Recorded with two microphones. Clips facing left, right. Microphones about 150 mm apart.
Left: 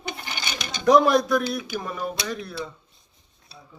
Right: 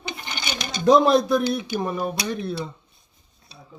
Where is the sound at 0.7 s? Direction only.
25° right (ahead or behind).